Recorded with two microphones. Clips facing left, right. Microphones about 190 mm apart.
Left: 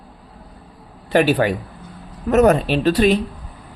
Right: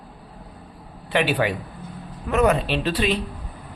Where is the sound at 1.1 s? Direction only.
40° left (ahead or behind).